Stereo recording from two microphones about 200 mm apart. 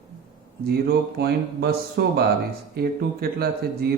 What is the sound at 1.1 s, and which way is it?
Speech, 55° right (ahead or behind).